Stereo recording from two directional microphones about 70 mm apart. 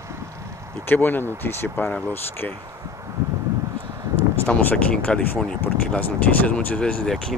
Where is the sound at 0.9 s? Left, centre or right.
Left.